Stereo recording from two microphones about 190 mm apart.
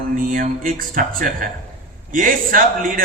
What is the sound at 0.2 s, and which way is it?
Music, 45° right (ahead or behind).